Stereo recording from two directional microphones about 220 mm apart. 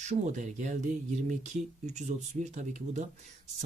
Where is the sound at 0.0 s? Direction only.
35° right (ahead or behind).